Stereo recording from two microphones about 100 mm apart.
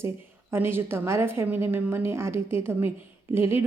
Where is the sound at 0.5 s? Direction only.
20° right (ahead or behind).